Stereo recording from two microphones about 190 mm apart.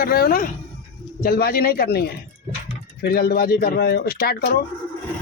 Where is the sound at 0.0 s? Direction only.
50° left (ahead or behind).